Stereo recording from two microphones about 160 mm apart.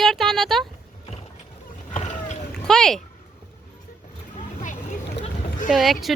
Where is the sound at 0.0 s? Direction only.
Centre (ahead or behind).